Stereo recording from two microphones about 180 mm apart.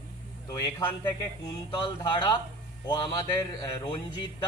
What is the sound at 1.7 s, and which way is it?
A man's voice, 25° left (ahead or behind).